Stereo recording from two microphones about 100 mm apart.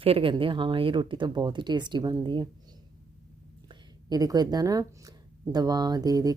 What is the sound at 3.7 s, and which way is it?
Speech, 40° right (ahead or behind).